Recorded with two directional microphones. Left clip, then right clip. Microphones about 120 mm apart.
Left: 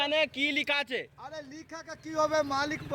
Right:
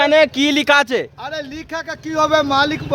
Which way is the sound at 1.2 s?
20° right (ahead or behind).